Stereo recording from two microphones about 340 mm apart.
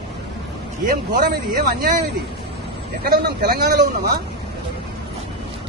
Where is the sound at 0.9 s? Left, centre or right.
Right.